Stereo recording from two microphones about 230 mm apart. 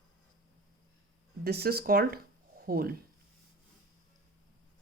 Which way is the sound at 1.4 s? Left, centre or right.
Right.